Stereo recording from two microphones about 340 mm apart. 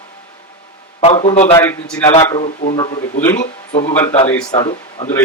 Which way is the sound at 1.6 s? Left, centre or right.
Centre.